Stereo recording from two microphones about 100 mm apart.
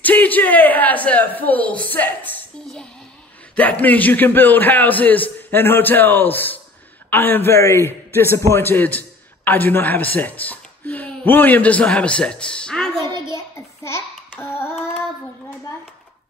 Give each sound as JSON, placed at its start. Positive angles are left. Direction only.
{"t": 0.0, "sound": "speech", "side_deg": 15}
{"t": 3.8, "sound": "a man's voice", "side_deg": 15}
{"t": 13.3, "sound": "child singing", "side_deg": 25}